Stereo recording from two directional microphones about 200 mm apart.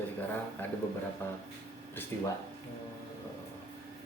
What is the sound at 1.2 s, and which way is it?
Speech, 10° left (ahead or behind).